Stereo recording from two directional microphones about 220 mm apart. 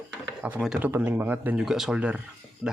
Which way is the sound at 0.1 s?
5° right (ahead or behind).